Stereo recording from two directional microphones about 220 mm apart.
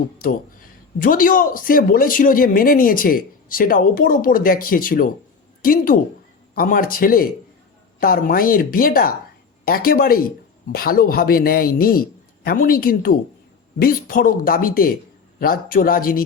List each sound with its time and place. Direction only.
0.2 s speech: 40° left (ahead or behind)